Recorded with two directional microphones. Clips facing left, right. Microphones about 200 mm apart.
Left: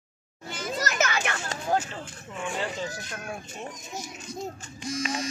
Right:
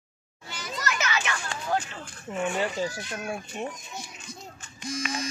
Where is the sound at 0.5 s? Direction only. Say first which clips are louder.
Left 2 dB; 50° left (ahead or behind).